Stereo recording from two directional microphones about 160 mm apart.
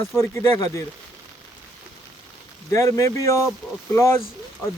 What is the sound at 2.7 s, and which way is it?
Speech, 20° left (ahead or behind).